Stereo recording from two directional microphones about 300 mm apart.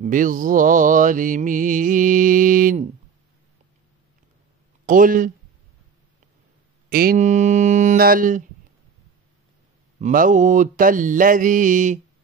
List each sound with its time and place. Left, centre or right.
0.0 s mantra: right
4.8 s mantra: right
6.9 s mantra: right
9.9 s mantra: right